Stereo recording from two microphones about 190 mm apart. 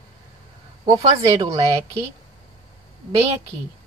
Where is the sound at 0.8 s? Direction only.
20° right (ahead or behind).